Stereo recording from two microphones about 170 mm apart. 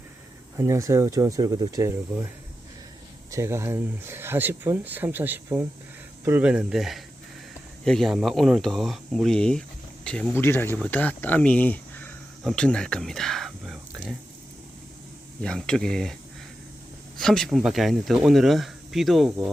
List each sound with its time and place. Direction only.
0.5 s speech: 15° right (ahead or behind)
3.3 s speech: 15° right (ahead or behind); by 14.2 s centre (ahead or behind)
15.4 s speech: 5° left (ahead or behind)
17.2 s speech: 5° left (ahead or behind)